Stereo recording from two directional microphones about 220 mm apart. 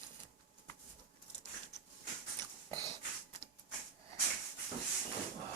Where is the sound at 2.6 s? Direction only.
20° right (ahead or behind).